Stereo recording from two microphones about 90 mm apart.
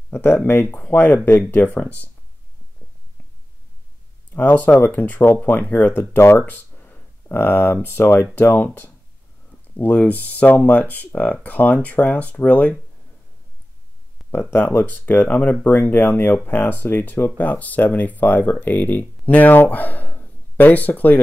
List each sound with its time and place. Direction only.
0.1 s speech: 25° left (ahead or behind)
4.3 s speech: 20° left (ahead or behind)
6.1 s speech: 25° left (ahead or behind)
9.8 s speech: 15° left (ahead or behind)
14.9 s speech: 20° left (ahead or behind)